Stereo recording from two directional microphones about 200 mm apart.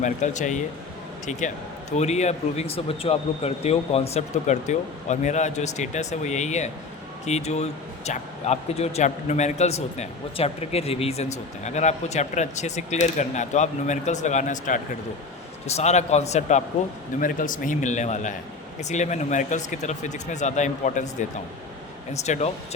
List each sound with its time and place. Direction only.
0.0 s speech: 35° left (ahead or behind)